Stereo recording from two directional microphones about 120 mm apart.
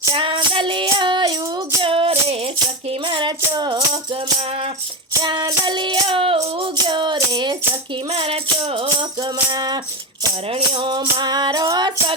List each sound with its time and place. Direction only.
0.1 s music: 45° right (ahead or behind)
3.0 s music: 40° right (ahead or behind)
5.2 s music: 35° right (ahead or behind)
7.7 s music: 50° right (ahead or behind)